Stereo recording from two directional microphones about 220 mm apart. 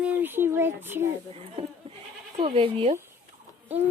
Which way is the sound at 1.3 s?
25° right (ahead or behind).